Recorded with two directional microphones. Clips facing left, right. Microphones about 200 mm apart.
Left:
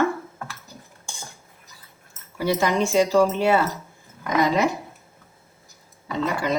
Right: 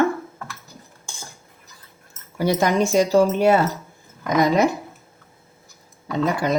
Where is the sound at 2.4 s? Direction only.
45° right (ahead or behind).